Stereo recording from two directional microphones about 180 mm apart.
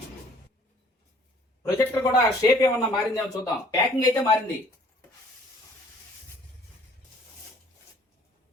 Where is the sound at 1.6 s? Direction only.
20° left (ahead or behind).